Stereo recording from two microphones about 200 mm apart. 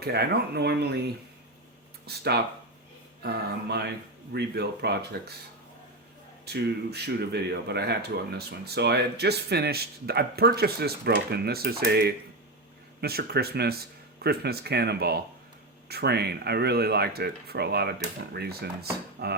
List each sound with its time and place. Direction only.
0.0 s speech: 55° right (ahead or behind)
4.3 s speech: 55° right (ahead or behind)
6.4 s speech: 55° right (ahead or behind)